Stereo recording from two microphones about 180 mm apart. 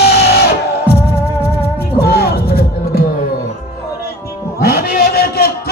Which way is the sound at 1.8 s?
60° left (ahead or behind).